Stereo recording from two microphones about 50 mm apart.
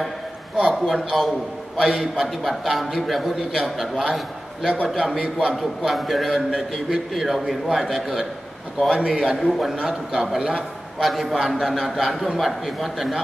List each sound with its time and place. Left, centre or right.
0.7 s a man's voice: centre
2.2 s a man's voice: centre
5.6 s a man's voice: centre
8.9 s a man's voice: centre
11.0 s a man's voice: centre